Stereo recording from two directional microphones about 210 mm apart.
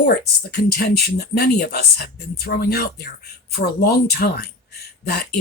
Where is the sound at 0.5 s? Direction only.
50° left (ahead or behind).